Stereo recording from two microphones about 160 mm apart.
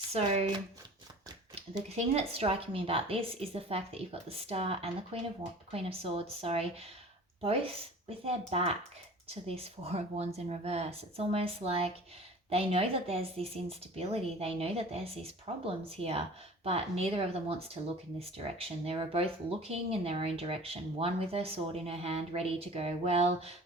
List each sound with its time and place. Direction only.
0.1 s speech: 40° right (ahead or behind)
2.0 s speech: 40° right (ahead or behind)